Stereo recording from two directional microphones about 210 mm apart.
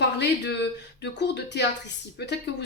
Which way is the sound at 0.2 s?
55° left (ahead or behind).